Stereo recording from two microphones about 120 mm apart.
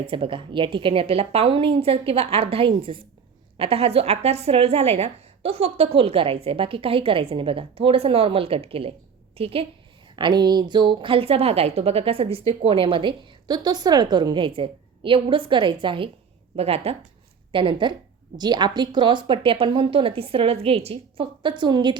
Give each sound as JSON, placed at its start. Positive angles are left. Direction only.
{"t": 0.0, "sound": "a woman's voice", "side_deg": -45}
{"t": 10.2, "sound": "a woman's voice", "side_deg": -40}
{"t": 16.6, "sound": "a woman's voice", "side_deg": -55}
{"t": 17.5, "sound": "a woman's voice", "side_deg": -45}